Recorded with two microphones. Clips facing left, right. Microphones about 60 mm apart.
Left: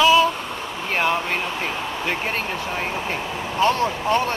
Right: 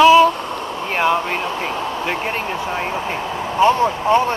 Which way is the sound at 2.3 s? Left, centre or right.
Right.